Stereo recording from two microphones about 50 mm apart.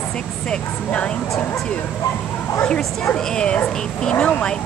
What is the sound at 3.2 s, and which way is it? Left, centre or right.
Speech, centre.